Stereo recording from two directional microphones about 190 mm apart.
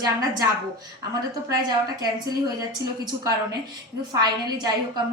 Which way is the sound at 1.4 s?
20° right (ahead or behind).